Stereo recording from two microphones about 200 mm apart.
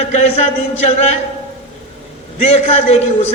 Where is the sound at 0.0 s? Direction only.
35° left (ahead or behind).